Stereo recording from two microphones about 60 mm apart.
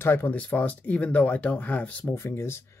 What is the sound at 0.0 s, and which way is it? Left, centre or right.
Speech, left.